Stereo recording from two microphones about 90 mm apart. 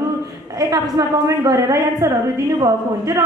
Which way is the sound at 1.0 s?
45° right (ahead or behind).